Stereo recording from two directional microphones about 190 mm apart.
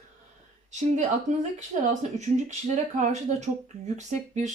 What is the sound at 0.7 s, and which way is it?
Speech, 40° right (ahead or behind).